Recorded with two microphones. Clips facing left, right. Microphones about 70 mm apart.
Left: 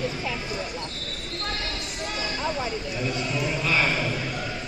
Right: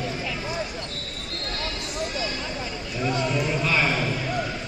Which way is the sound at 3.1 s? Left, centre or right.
Right.